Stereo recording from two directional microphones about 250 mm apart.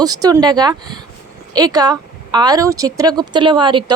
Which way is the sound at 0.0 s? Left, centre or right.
Centre.